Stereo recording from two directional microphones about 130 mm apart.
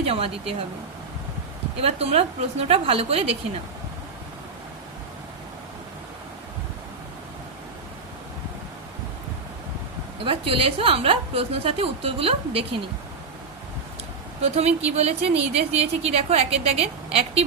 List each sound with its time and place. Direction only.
0.0 s speech: 50° right (ahead or behind)
1.8 s speech: 50° right (ahead or behind)
10.2 s speech: 45° right (ahead or behind)
14.4 s speech: 55° right (ahead or behind)